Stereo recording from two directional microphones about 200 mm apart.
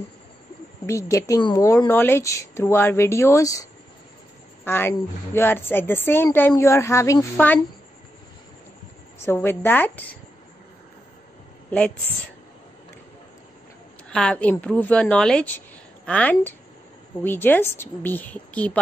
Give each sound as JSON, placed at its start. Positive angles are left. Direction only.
{"t": 0.8, "sound": "a woman's voice", "side_deg": 15}
{"t": 4.6, "sound": "a woman's voice", "side_deg": 10}
{"t": 9.2, "sound": "a woman's voice", "side_deg": 10}
{"t": 14.1, "sound": "a woman's voice", "side_deg": 5}